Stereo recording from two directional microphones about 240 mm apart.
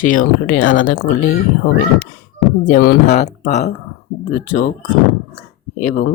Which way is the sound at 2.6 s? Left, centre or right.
Left.